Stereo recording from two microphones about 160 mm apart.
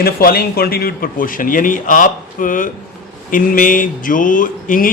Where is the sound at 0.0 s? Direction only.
70° left (ahead or behind).